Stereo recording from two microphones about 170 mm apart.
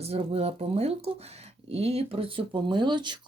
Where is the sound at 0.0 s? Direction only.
35° right (ahead or behind).